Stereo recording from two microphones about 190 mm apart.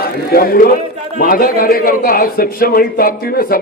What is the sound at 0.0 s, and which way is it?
A man's voice, 50° left (ahead or behind).